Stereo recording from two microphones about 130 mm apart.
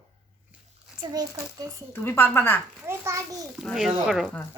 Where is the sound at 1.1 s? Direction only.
30° right (ahead or behind).